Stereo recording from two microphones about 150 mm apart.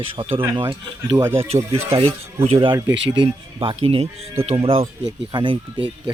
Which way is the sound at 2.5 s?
35° right (ahead or behind).